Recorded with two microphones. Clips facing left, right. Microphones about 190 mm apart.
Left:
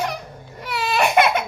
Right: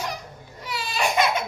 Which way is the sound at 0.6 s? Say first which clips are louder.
Left 6 dB; 60° left (ahead or behind).